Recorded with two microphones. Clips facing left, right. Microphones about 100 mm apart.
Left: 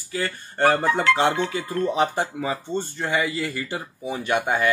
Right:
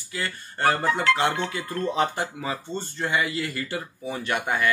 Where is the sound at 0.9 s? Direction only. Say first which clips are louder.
Left 3 dB; 20° left (ahead or behind).